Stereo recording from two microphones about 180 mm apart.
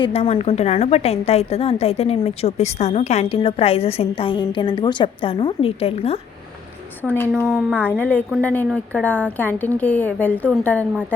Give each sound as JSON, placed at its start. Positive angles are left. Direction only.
{"t": 0.0, "sound": "a woman's voice", "side_deg": 35}
{"t": 7.0, "sound": "a woman's voice", "side_deg": 10}
{"t": 7.5, "sound": "a woman's voice", "side_deg": -5}
{"t": 7.9, "sound": "a woman's voice", "side_deg": 10}